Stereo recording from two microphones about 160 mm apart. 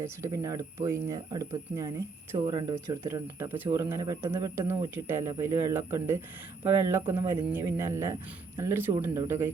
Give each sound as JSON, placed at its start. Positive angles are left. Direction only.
{"t": 0.0, "sound": "speech", "side_deg": -20}